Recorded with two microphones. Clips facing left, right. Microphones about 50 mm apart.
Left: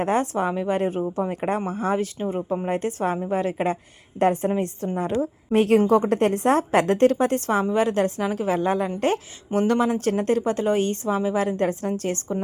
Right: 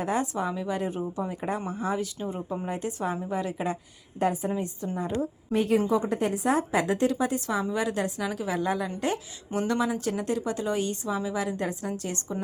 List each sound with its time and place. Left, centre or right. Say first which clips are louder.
0.0 s a woman's voice: left 5 dB; left
5.5 s a woman's voice: left 6 dB; left
5.9 s a woman's voice: left 7 dB; left
9.5 s a woman's voice: left 6 dB; left